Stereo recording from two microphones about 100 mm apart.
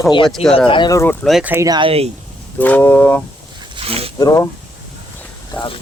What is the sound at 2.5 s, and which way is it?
Speech, 15° left (ahead or behind).